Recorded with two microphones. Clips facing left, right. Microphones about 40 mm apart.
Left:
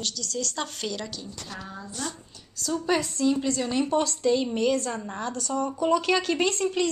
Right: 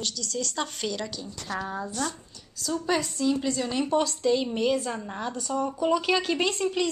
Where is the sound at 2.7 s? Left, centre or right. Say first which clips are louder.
Left 1 dB; centre.